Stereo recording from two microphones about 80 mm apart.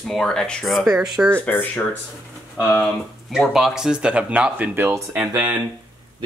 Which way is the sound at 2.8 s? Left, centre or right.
Centre.